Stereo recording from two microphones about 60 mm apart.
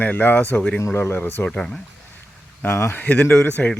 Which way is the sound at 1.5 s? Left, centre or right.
Centre.